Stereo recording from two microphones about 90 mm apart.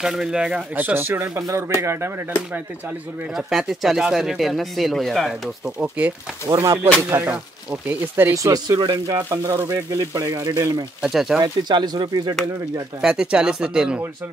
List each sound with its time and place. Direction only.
0.0 s speech: 5° right (ahead or behind)
0.7 s speech: 20° right (ahead or behind)
3.3 s speech: centre (ahead or behind)
5.8 s speech: 15° right (ahead or behind)
6.5 s speech: 35° right (ahead or behind)
8.4 s speech: 45° right (ahead or behind)
11.1 s speech: 5° right (ahead or behind)
11.4 s speech: 50° right (ahead or behind)
13.0 s speech: 10° right (ahead or behind)